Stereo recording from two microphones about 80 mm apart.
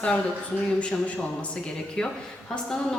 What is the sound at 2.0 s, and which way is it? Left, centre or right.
Speech, centre.